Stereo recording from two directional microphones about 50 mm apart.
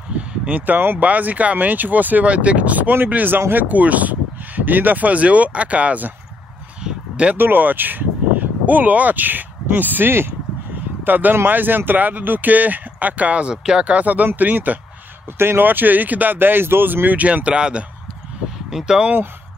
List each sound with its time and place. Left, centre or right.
0.5 s speech: right
3.3 s speech: right
3.6 s speech: right
6.8 s a sound: right
7.3 s speech: right
15.3 s speech: right; by 17.8 s centre
18.7 s speech: centre